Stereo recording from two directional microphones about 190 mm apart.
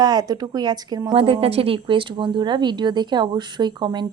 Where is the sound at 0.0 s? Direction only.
20° right (ahead or behind).